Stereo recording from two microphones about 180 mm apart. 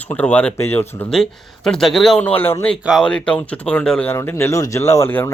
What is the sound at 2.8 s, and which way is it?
Speech, centre (ahead or behind).